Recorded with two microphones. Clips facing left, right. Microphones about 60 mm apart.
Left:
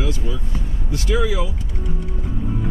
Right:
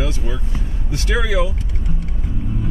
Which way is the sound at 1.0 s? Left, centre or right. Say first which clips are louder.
Right 1 dB; right.